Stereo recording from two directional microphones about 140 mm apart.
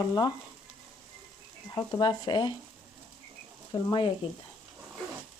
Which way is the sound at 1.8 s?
30° left (ahead or behind).